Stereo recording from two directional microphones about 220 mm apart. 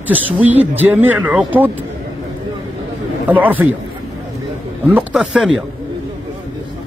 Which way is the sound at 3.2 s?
5° right (ahead or behind).